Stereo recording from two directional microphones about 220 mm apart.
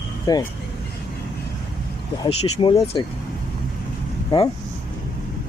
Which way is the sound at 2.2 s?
25° left (ahead or behind).